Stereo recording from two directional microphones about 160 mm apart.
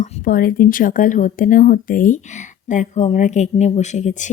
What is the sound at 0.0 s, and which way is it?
Speech, 55° left (ahead or behind).